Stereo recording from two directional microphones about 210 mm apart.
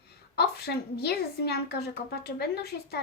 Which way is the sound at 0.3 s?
50° left (ahead or behind).